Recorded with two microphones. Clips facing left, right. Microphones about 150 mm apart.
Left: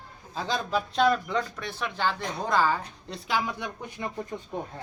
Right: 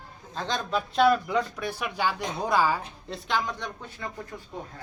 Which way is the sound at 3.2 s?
5° left (ahead or behind).